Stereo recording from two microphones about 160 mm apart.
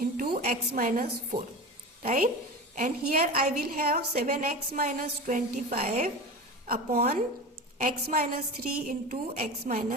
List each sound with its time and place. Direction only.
0.0 s a woman's voice: 65° right (ahead or behind)
6.7 s a woman's voice: 70° right (ahead or behind)